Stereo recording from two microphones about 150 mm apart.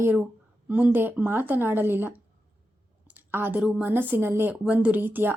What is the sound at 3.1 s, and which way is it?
Clicking, 15° right (ahead or behind).